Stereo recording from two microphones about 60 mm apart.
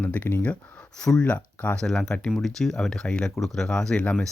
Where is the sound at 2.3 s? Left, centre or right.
Centre.